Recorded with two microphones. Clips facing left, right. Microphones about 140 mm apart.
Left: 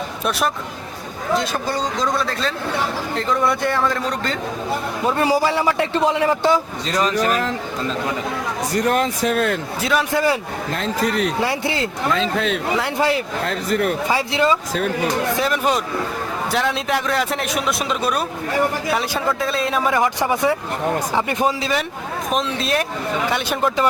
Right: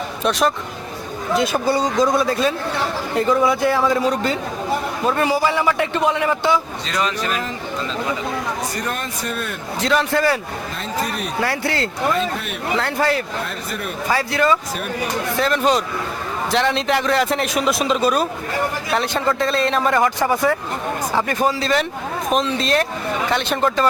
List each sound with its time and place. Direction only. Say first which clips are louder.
0.3 s a man's voice: right 3 dB; 5° left (ahead or behind)
1.4 s a man's voice: right 9 dB; 10° right (ahead or behind)
5.0 s speech: even; 25° left (ahead or behind)
5.3 s a man's voice: even; 35° left (ahead or behind)
8.7 s speech: left 7 dB; 90° left
9.8 s speech: right 1 dB; 5° left (ahead or behind)
10.8 s speech: left 5 dB; 90° left
11.4 s speech: even; 15° left (ahead or behind)
12.1 s speech: left 3 dB; 90° left
12.7 s speech: right 3 dB; 15° left (ahead or behind)
13.4 s speech: left 7 dB; 90° left
14.1 s speech: right 4 dB; 20° left (ahead or behind)
15.4 s a man's voice: right 2 dB; 10° left (ahead or behind)
22.3 s a man's voice: right 2 dB; centre (ahead or behind)